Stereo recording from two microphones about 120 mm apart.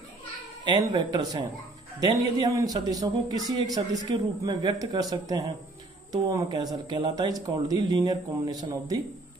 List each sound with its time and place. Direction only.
0.7 s speech: 35° right (ahead or behind)